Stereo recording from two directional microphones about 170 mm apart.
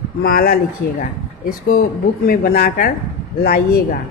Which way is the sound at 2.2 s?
60° left (ahead or behind).